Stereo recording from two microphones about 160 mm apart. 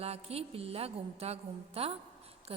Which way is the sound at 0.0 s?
40° right (ahead or behind).